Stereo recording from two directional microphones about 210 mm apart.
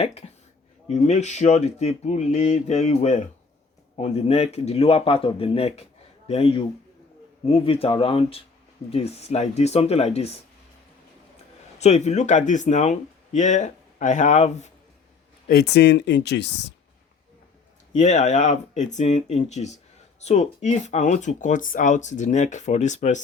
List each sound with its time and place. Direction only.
0.0 s a man's voice: 30° left (ahead or behind)
11.8 s speech: 30° left (ahead or behind)
15.4 s speech: 50° left (ahead or behind)
17.9 s speech: 35° left (ahead or behind)